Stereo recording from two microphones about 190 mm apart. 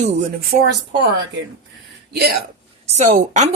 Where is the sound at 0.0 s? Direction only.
35° right (ahead or behind).